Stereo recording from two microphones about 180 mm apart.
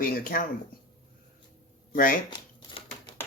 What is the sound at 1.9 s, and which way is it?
Speech, 50° left (ahead or behind).